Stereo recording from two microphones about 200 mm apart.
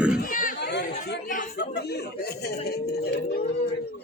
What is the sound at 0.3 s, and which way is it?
Chatter, 40° left (ahead or behind).